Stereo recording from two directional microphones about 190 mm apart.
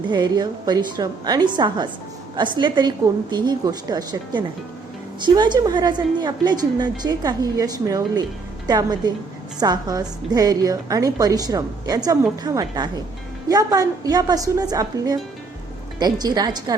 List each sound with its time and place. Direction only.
0.1 s a woman's voice: 25° right (ahead or behind)